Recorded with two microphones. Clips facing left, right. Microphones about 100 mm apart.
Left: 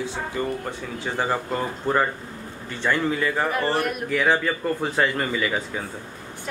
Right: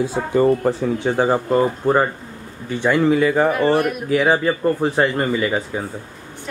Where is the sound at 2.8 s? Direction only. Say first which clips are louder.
Right 7 dB; 15° right (ahead or behind).